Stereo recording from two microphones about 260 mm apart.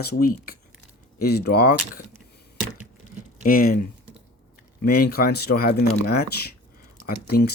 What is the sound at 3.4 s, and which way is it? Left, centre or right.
Speech, left.